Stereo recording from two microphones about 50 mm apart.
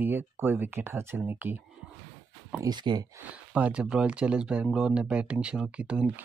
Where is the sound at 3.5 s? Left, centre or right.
Right.